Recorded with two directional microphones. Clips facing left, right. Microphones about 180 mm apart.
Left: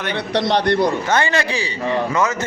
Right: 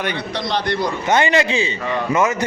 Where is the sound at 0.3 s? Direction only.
65° left (ahead or behind).